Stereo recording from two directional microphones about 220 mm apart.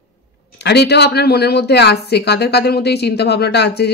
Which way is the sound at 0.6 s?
50° left (ahead or behind).